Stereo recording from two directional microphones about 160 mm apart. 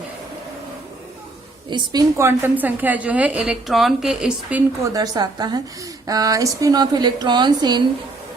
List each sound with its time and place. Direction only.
1.7 s a woman's voice: 25° right (ahead or behind); by 4.6 s 5° right (ahead or behind)
4.8 s speech: 25° right (ahead or behind)